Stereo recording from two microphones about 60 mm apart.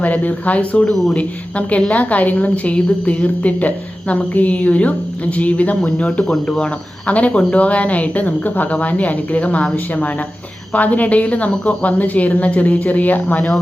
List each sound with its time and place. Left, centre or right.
0.0 s a woman's voice: left